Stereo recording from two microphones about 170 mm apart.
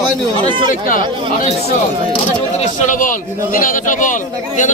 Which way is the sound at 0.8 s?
50° left (ahead or behind).